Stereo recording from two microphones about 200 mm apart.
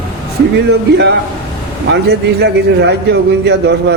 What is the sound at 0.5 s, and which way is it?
A man's voice, 60° right (ahead or behind).